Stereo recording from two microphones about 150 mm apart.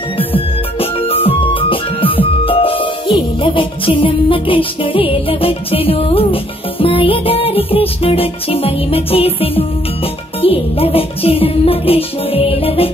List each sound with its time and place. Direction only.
0.7 s music: 40° left (ahead or behind)